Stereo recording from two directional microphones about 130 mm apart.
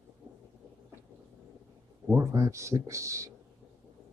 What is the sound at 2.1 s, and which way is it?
Speech, 25° right (ahead or behind).